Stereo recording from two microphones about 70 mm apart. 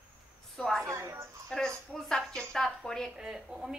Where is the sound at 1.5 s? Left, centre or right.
Centre.